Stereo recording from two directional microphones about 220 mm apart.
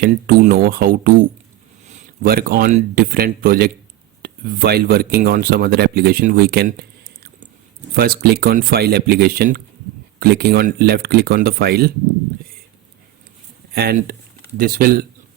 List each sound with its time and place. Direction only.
0.0 s speech: 45° right (ahead or behind)
7.9 s speech: 45° right (ahead or behind)
13.7 s speech: 45° right (ahead or behind)